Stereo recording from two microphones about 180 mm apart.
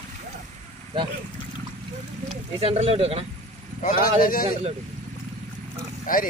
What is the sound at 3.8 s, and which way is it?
Speech, 50° left (ahead or behind).